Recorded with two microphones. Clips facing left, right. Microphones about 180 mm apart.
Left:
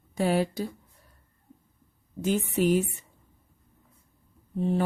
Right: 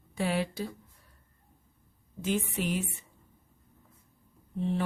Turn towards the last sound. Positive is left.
turn(degrees=45)  # may be behind; listen again after turning